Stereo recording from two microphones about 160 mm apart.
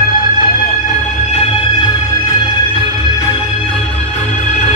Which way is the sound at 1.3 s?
30° left (ahead or behind).